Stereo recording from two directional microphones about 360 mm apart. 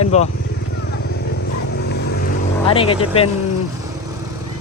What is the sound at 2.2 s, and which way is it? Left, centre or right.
Vehicle, centre.